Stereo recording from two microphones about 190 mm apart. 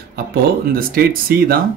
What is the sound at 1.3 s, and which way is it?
Speech, 55° right (ahead or behind).